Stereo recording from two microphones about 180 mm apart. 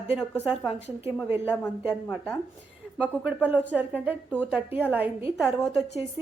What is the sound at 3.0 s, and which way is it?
A woman's voice, 10° right (ahead or behind).